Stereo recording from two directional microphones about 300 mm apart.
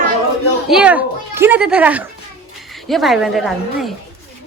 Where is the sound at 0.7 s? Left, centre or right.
Centre.